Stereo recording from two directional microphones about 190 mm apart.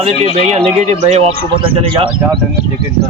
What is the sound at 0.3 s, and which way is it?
Speech, 35° right (ahead or behind).